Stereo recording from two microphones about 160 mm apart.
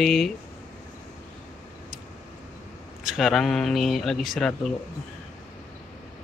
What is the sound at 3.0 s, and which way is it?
Speech, centre (ahead or behind).